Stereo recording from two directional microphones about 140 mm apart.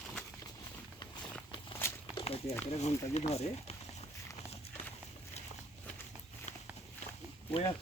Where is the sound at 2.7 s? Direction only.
50° left (ahead or behind).